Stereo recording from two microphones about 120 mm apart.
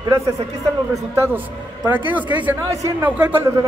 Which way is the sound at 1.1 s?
20° right (ahead or behind).